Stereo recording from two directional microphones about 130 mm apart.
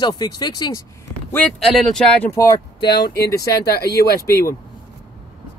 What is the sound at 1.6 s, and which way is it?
Speech, 5° left (ahead or behind).